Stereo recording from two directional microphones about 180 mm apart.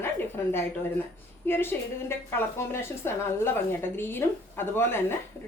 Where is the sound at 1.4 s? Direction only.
10° left (ahead or behind).